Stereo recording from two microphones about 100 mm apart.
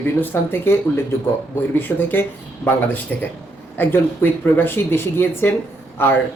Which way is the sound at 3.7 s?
20° left (ahead or behind).